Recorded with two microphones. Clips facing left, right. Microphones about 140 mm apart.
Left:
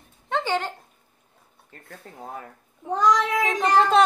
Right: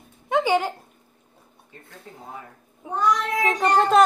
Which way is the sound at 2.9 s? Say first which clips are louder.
Left 2 dB; 90° left.